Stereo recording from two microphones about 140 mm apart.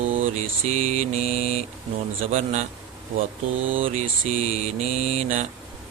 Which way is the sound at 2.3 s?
60° right (ahead or behind).